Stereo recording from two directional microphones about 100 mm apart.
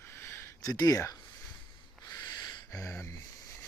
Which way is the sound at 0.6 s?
40° left (ahead or behind).